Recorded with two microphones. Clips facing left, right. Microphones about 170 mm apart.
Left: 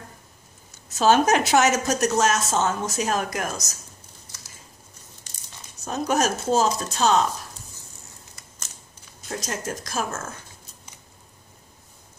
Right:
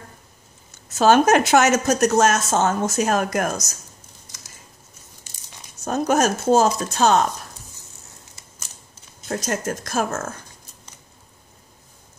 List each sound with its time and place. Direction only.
0.9 s speech: 55° right (ahead or behind)
5.9 s speech: 45° right (ahead or behind)
9.3 s speech: 55° right (ahead or behind)